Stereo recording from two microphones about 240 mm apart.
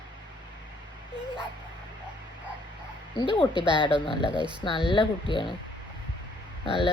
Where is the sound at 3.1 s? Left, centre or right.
Left.